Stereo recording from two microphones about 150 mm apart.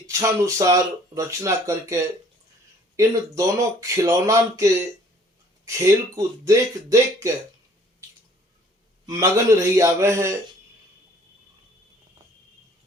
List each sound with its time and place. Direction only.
0.1 s speech: 20° right (ahead or behind)
9.0 s speech: 20° right (ahead or behind)